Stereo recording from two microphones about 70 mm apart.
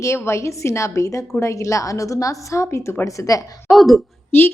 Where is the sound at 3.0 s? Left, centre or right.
Left.